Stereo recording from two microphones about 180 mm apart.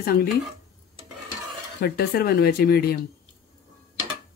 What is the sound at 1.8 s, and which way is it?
Speech, 60° left (ahead or behind).